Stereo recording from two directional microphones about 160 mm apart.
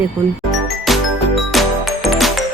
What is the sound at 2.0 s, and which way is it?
Music, centre (ahead or behind).